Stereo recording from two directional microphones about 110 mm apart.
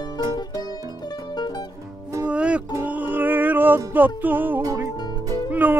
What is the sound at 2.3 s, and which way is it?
Music, 10° right (ahead or behind).